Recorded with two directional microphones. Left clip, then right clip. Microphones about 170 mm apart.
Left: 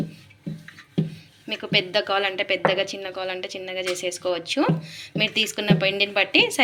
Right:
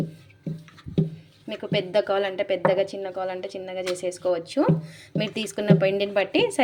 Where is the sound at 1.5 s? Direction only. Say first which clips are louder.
Left 4 dB; 30° right (ahead or behind).